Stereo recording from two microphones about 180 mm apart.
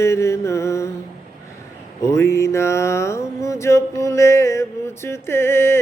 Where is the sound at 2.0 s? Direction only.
15° left (ahead or behind).